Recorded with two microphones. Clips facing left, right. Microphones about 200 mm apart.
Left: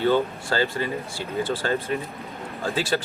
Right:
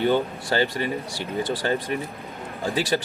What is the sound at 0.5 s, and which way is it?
A man's voice, 20° right (ahead or behind).